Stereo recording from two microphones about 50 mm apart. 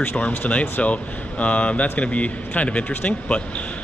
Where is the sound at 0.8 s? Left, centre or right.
Left.